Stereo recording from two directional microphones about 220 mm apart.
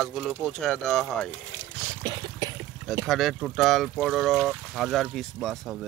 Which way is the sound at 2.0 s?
20° right (ahead or behind).